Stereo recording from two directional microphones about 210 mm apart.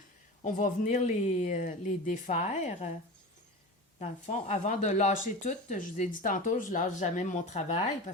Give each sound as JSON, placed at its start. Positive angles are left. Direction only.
{"t": 0.4, "sound": "speech", "side_deg": 35}
{"t": 4.0, "sound": "speech", "side_deg": 30}